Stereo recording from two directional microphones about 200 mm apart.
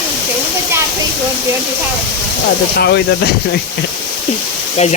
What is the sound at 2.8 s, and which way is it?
Speech, 55° left (ahead or behind).